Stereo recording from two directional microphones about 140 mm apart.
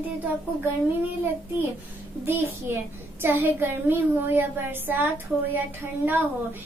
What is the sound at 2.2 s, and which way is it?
A woman's voice, 15° right (ahead or behind).